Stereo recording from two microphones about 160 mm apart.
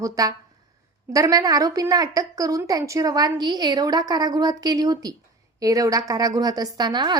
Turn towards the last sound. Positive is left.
turn(degrees=-25)  # may be behind; listen again after turning